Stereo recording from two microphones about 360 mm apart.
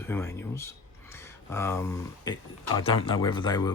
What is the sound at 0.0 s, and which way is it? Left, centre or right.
Speech, centre.